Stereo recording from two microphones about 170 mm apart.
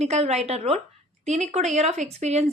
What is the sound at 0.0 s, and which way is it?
A woman's voice, 40° right (ahead or behind).